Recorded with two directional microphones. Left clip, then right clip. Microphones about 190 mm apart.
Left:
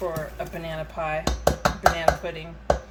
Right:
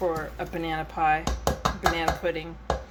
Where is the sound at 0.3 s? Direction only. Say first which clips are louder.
Right 2 dB; 45° right (ahead or behind).